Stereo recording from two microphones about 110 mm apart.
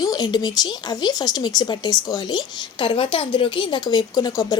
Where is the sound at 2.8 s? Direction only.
50° left (ahead or behind); by 4.5 s 35° left (ahead or behind).